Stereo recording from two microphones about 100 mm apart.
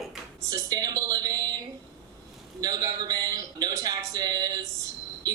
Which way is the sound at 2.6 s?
40° right (ahead or behind).